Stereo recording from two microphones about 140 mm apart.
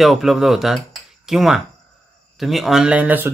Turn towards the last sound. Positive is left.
turn(degrees=-10)  # may be behind; listen again after turning